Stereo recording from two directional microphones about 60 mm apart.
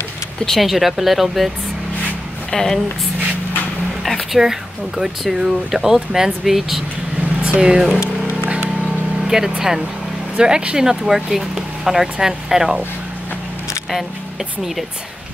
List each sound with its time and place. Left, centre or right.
0.5 s speech: centre
2.5 s speech: centre
4.0 s speech: centre
7.4 s speech: centre
9.3 s speech: centre